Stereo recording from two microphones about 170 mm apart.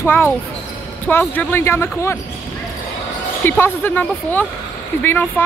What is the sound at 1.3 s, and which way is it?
Speech, 10° left (ahead or behind).